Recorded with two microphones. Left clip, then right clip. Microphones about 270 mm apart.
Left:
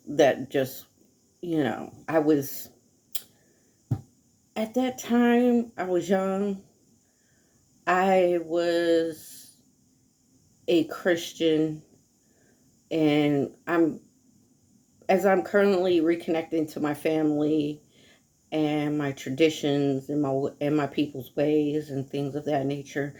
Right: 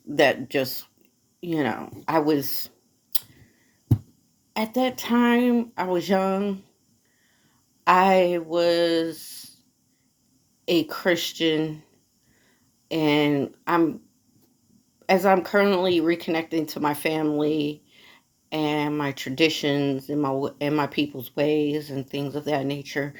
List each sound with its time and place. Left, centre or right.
0.1 s speech: centre
4.5 s speech: centre
7.9 s speech: centre
10.7 s speech: centre
12.9 s speech: centre
15.0 s speech: centre